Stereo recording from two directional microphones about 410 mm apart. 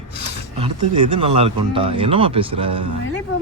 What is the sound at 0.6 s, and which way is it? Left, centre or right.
A man's voice, centre.